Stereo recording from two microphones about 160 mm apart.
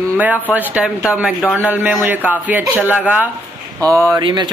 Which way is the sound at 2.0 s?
10° right (ahead or behind).